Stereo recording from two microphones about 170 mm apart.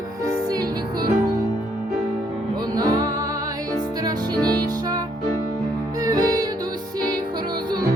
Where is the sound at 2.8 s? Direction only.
20° right (ahead or behind).